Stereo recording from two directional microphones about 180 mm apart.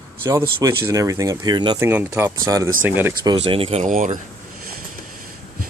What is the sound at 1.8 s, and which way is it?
Speech, 10° right (ahead or behind).